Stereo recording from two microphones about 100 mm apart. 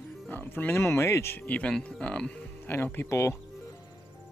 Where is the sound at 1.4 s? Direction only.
15° left (ahead or behind).